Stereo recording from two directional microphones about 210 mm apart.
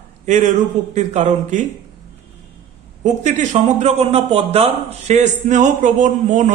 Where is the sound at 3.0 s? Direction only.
35° right (ahead or behind).